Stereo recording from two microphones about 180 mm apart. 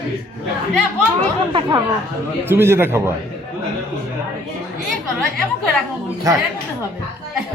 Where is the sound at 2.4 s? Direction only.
10° right (ahead or behind).